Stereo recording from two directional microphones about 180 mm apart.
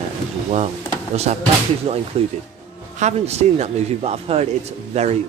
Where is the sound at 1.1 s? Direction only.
35° right (ahead or behind).